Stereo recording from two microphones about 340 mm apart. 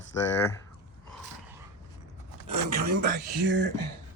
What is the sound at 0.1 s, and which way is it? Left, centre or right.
Speech, centre.